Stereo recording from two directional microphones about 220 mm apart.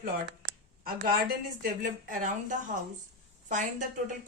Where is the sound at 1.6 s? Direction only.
40° right (ahead or behind).